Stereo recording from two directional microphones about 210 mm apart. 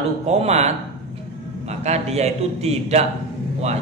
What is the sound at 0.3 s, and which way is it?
A man's voice, 30° right (ahead or behind).